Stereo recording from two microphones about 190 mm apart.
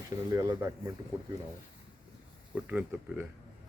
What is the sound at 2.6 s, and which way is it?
Speech, 10° right (ahead or behind).